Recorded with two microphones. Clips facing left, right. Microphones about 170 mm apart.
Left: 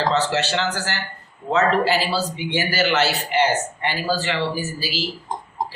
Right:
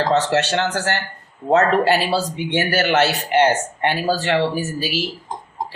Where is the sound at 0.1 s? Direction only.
55° right (ahead or behind).